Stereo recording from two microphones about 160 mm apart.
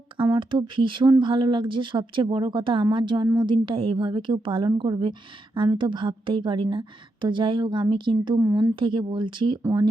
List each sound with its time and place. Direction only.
0.3 s a woman's voice: 30° right (ahead or behind)